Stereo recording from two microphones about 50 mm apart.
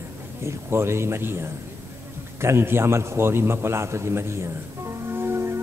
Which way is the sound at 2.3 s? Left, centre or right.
Right.